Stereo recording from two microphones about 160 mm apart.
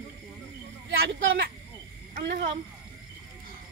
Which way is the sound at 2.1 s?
75° right (ahead or behind).